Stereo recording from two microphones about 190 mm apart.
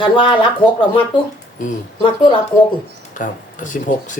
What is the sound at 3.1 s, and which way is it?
Speech, 45° left (ahead or behind).